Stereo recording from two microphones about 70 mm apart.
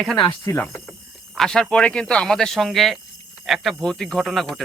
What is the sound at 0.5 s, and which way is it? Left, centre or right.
Speech, left.